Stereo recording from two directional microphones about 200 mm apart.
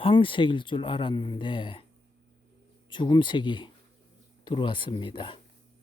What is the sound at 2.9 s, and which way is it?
Speech, 25° left (ahead or behind).